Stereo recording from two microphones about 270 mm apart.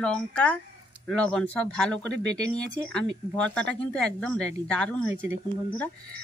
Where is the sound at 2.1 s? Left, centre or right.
Right.